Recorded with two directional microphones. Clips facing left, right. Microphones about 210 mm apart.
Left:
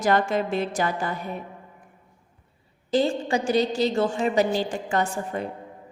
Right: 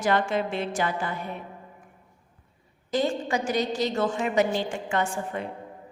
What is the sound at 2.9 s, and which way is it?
A woman's voice, 30° left (ahead or behind).